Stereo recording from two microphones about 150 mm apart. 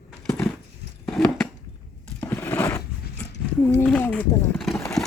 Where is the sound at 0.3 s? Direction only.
10° left (ahead or behind).